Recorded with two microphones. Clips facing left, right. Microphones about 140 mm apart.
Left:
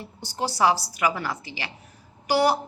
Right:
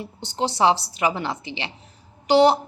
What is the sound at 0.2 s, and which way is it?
A woman's voice, 20° right (ahead or behind).